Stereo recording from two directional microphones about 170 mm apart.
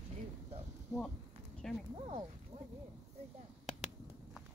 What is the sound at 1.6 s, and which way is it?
Speech, 5° left (ahead or behind).